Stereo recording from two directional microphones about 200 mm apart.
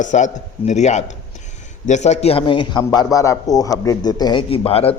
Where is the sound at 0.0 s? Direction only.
35° left (ahead or behind).